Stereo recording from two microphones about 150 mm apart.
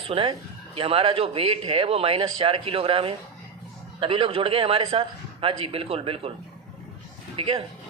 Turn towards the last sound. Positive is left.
turn(degrees=-40)  # may be behind; listen again after turning